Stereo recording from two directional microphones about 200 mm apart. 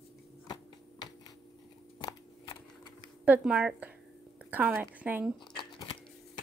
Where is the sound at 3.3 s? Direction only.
5° right (ahead or behind).